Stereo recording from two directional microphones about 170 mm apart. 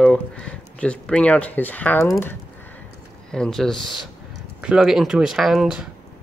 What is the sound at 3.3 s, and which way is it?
Speech, 5° left (ahead or behind).